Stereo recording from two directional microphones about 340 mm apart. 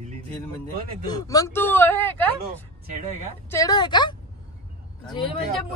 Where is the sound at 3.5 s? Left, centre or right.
Centre.